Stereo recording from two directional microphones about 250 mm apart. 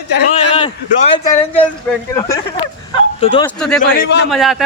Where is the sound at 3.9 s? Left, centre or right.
Left.